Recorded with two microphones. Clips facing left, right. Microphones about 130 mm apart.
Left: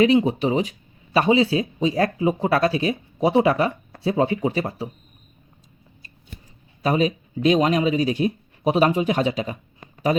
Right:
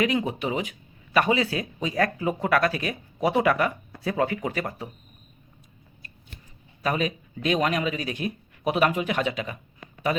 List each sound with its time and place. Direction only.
0.0 s speech: 30° left (ahead or behind)
6.8 s speech: 30° left (ahead or behind)